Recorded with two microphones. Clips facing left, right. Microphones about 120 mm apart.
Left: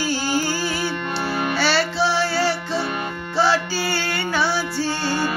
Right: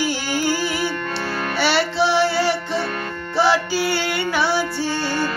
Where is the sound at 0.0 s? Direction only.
20° right (ahead or behind).